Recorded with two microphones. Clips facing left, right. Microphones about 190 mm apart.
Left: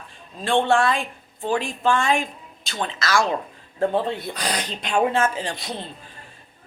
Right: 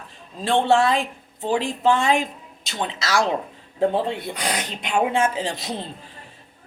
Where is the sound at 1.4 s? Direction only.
20° right (ahead or behind).